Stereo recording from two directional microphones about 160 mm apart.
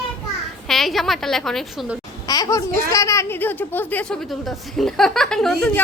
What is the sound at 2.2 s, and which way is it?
A woman's voice, 25° left (ahead or behind).